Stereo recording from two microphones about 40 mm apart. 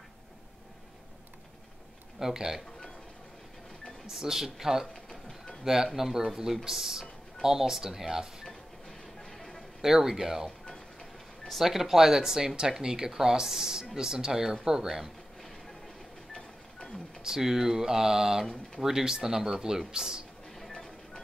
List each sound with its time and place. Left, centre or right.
2.1 s speech: centre
4.1 s speech: centre
4.9 s a sound: centre
5.6 s speech: centre
8.5 s music: centre
9.8 s speech: centre
10.7 s a sound: centre
11.6 s speech: centre
17.2 s speech: centre
20.7 s music: centre